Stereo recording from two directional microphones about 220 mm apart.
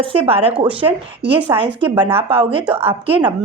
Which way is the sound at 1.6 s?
25° right (ahead or behind).